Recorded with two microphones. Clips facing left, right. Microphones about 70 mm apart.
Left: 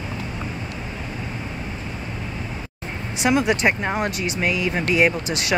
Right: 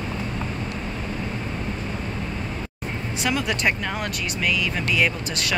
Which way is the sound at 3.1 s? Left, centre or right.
Left.